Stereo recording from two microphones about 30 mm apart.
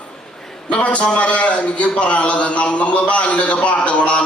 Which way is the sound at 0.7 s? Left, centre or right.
Left.